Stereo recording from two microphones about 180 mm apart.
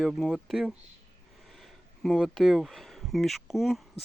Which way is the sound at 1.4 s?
Centre (ahead or behind).